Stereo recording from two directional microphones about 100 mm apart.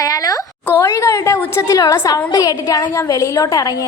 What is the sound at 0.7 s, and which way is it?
A woman's voice, 25° left (ahead or behind).